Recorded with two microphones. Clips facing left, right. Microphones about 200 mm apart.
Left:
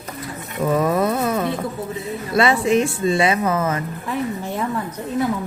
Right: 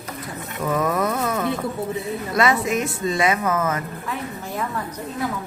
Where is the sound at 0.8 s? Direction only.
30° left (ahead or behind).